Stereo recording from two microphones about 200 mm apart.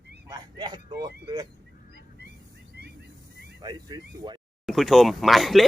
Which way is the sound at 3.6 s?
20° right (ahead or behind).